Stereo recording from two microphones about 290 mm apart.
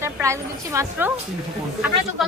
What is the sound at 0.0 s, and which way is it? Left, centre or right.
A woman's voice, centre.